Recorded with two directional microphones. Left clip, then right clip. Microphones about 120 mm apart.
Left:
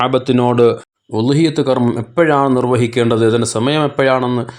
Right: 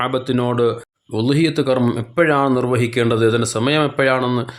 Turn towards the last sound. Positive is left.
turn(degrees=25)  # may be behind; listen again after turning